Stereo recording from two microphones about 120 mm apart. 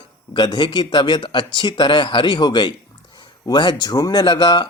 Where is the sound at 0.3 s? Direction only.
40° left (ahead or behind).